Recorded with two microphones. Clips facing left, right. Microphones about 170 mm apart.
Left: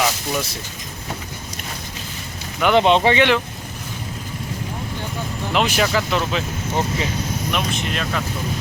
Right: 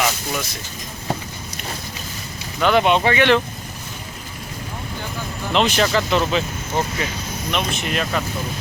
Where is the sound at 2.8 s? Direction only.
25° left (ahead or behind).